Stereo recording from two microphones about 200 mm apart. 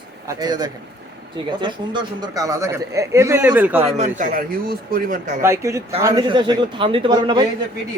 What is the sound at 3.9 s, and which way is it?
A man's voice, 35° right (ahead or behind).